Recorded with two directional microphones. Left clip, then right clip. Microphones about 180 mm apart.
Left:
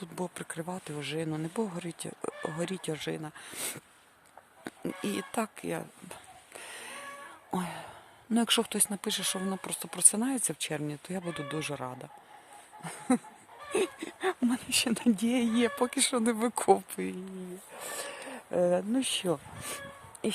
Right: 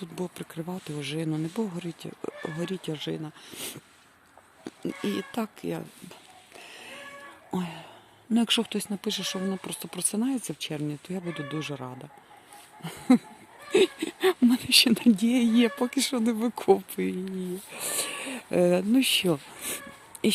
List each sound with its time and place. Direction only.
0.0 s speech: 10° left (ahead or behind)
6.6 s music: 15° left (ahead or behind)
7.5 s speech: 10° left (ahead or behind)
13.7 s speech: 15° right (ahead or behind)
15.1 s speech: 5° left (ahead or behind)
17.7 s a sound: 20° right (ahead or behind)
18.5 s speech: 5° right (ahead or behind)